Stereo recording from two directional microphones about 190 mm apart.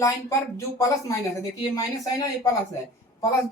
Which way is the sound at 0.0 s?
15° left (ahead or behind).